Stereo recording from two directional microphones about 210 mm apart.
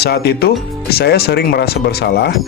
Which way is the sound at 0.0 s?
50° left (ahead or behind).